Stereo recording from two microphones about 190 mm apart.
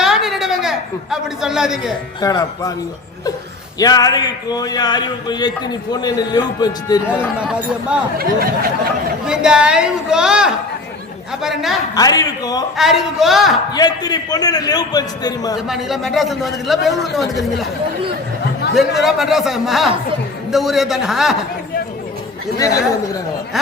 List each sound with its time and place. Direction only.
0.0 s a sound: centre (ahead or behind)
2.2 s speech: 20° left (ahead or behind)
3.8 s speech: 20° left (ahead or behind)
7.3 s a man's voice: 5° right (ahead or behind)
9.2 s a man's voice: 5° right (ahead or behind)
11.9 s speech: 20° left (ahead or behind)
12.7 s a man's voice: centre (ahead or behind)
13.7 s speech: 20° left (ahead or behind)
15.5 s a man's voice: centre (ahead or behind)
18.7 s a man's voice: centre (ahead or behind)
22.5 s speech: 15° left (ahead or behind)